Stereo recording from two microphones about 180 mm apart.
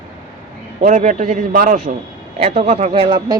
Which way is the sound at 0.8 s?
45° right (ahead or behind).